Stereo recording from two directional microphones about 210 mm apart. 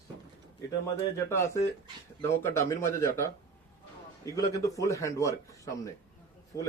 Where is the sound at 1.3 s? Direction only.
15° left (ahead or behind).